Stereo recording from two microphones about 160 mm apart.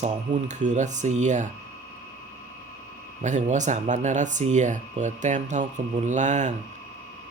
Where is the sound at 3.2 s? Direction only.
50° right (ahead or behind).